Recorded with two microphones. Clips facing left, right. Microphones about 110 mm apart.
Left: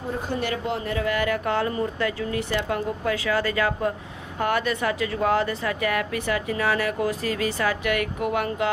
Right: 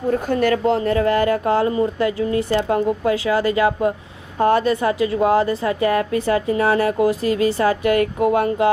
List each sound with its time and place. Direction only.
0.3 s speech: 55° right (ahead or behind)
0.6 s a woman's voice: 40° right (ahead or behind)